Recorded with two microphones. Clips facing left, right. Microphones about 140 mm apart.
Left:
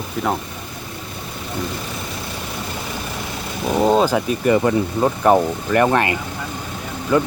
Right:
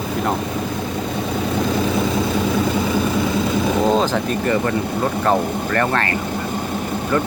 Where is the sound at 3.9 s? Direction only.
10° left (ahead or behind).